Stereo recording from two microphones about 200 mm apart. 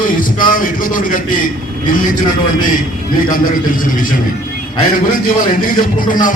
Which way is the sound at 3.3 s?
45° left (ahead or behind).